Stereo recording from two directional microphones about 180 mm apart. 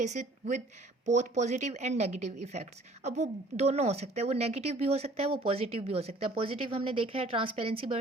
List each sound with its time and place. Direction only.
0.0 s speech: 40° right (ahead or behind)